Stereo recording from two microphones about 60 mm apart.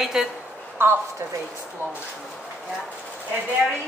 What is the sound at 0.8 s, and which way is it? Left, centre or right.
Speech, right.